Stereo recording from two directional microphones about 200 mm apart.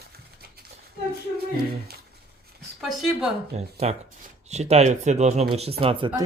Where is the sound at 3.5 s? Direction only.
30° right (ahead or behind).